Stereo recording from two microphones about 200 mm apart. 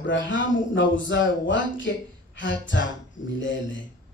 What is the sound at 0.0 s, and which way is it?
Speech, 65° left (ahead or behind).